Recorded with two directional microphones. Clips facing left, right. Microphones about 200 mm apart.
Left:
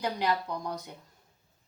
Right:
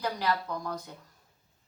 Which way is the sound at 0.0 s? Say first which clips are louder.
Left 1 dB; 20° left (ahead or behind).